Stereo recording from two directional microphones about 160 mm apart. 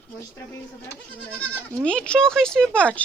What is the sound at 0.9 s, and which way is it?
Speech, 10° left (ahead or behind).